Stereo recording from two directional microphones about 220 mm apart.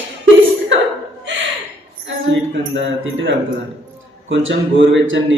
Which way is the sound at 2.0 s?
55° right (ahead or behind).